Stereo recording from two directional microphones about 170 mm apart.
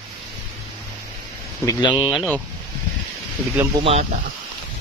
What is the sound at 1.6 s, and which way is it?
Speech, 25° left (ahead or behind).